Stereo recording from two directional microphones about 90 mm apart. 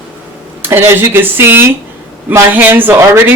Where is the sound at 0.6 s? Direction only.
25° right (ahead or behind).